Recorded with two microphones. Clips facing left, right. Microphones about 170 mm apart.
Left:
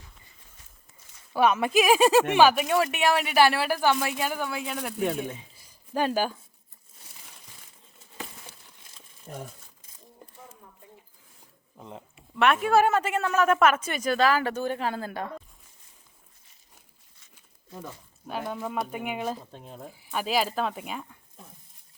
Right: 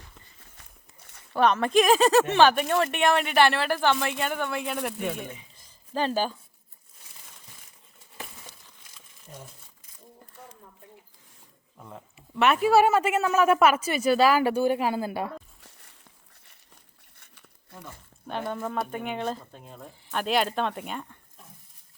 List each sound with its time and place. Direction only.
1.3 s speech: 10° left (ahead or behind)
5.5 s a sound: 10° left (ahead or behind)
9.3 s speech: 80° left
11.8 s speech: 20° left (ahead or behind)
12.1 s a woman's voice: centre (ahead or behind)
15.6 s a sound: 75° right (ahead or behind)
18.3 s speech: 5° left (ahead or behind)